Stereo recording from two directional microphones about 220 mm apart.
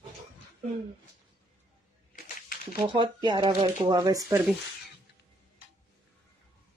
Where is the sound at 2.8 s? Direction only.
20° right (ahead or behind).